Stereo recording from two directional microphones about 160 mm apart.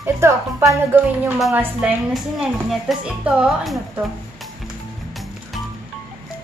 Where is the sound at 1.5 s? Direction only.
5° right (ahead or behind).